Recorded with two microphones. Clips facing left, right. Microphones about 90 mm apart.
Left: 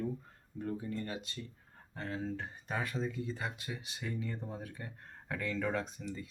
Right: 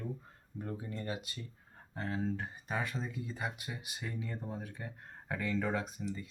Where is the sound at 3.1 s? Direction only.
15° right (ahead or behind).